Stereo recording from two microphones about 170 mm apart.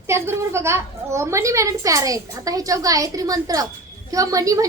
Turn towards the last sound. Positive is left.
turn(degrees=-20)  # may be behind; listen again after turning